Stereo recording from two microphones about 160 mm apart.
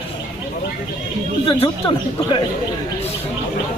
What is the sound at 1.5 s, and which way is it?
Speech, 35° left (ahead or behind).